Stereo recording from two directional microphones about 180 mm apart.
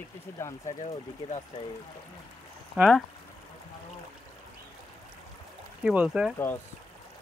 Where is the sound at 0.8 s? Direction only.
40° left (ahead or behind).